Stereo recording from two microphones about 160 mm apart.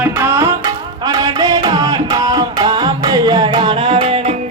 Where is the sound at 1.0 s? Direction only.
20° right (ahead or behind).